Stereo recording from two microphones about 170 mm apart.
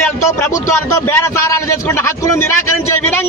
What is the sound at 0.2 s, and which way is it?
A man's voice, 15° left (ahead or behind).